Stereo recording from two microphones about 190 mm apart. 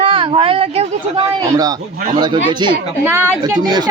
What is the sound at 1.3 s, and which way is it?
Speech, 20° right (ahead or behind).